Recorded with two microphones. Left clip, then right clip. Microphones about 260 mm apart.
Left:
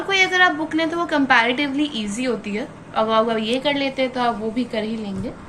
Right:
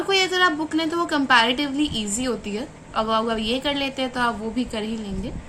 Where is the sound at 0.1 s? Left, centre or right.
Right.